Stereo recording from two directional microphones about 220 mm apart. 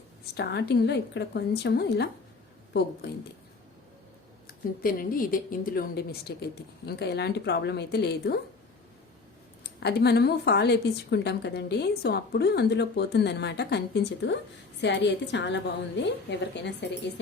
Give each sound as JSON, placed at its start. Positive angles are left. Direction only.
{"t": 0.3, "sound": "a woman's voice", "side_deg": 50}
{"t": 4.8, "sound": "a woman's voice", "side_deg": 40}
{"t": 9.8, "sound": "a woman's voice", "side_deg": 50}